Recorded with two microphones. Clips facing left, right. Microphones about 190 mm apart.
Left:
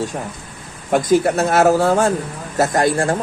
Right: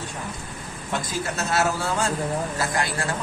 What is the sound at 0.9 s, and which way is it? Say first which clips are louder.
Speech: left 14 dB; 55° left (ahead or behind).